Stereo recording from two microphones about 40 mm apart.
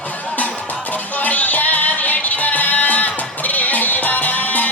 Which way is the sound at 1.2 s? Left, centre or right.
Left.